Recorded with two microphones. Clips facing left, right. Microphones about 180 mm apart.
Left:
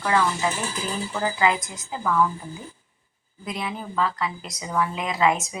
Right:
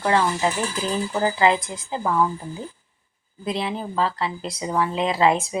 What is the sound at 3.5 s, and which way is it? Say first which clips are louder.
Speech: right 5 dB; 30° right (ahead or behind).